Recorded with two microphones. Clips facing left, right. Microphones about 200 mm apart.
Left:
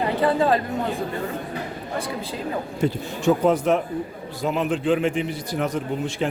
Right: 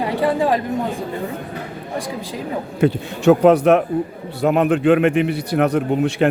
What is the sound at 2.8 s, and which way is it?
Speech, 70° right (ahead or behind).